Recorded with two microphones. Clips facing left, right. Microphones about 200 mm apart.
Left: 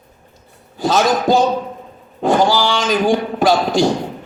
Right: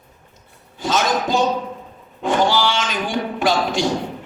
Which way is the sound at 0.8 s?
40° left (ahead or behind).